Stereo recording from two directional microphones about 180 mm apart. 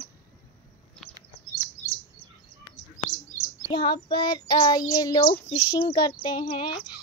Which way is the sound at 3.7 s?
25° left (ahead or behind).